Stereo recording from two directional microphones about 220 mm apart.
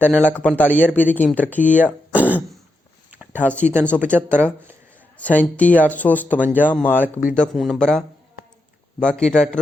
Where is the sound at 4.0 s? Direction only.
10° right (ahead or behind).